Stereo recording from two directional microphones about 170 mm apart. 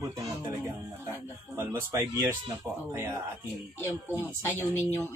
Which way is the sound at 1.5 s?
15° right (ahead or behind).